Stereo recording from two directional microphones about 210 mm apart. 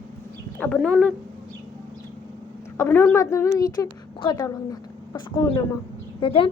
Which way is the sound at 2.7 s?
10° left (ahead or behind).